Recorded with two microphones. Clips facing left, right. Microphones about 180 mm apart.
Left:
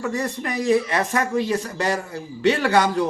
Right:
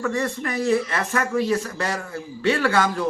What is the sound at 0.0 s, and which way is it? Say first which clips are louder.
Speech: right 1 dB; 15° left (ahead or behind).